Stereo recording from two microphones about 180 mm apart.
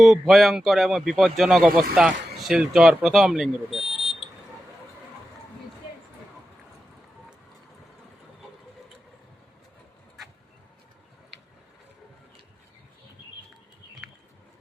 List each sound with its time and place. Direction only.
0.0 s speech: centre (ahead or behind)
3.8 s buzzer: 35° right (ahead or behind)